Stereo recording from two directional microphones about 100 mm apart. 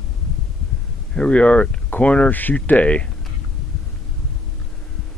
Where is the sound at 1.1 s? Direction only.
10° left (ahead or behind).